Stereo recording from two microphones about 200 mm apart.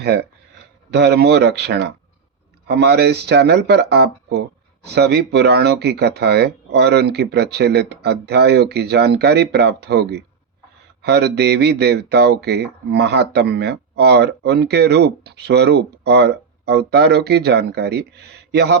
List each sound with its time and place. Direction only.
0.0 s speech: 55° right (ahead or behind)